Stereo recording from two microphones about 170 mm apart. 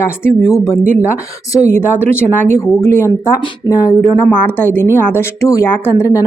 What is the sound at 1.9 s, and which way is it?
Speech, 15° left (ahead or behind).